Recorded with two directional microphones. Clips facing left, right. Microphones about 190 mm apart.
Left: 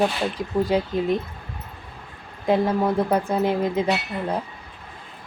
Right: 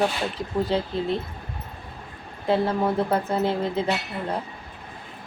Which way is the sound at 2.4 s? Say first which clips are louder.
Left 2 dB; 15° left (ahead or behind).